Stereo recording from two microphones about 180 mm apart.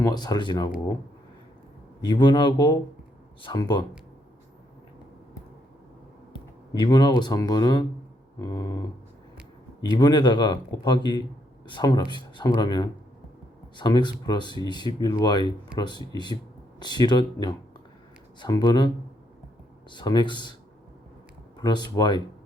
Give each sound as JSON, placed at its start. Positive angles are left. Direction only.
{"t": 0.0, "sound": "speech", "side_deg": 20}
{"t": 2.0, "sound": "speech", "side_deg": 25}
{"t": 6.3, "sound": "a sound", "side_deg": 25}
{"t": 7.2, "sound": "speech", "side_deg": 20}
{"t": 9.8, "sound": "speech", "side_deg": 25}
{"t": 19.9, "sound": "speech", "side_deg": 25}
{"t": 21.6, "sound": "speech", "side_deg": 25}